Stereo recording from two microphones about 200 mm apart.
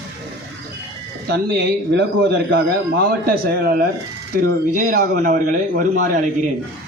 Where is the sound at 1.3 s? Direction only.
55° right (ahead or behind).